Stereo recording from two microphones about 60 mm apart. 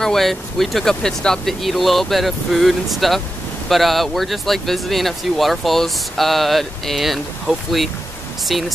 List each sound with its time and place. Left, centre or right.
0.0 s speech: centre